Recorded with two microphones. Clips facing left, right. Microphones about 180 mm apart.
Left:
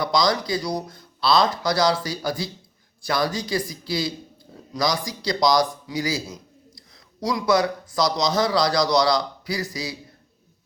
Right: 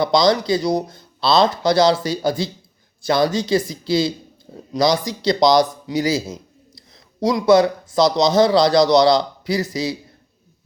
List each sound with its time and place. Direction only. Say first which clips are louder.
0.0 s a man's voice: right 6 dB; 25° right (ahead or behind)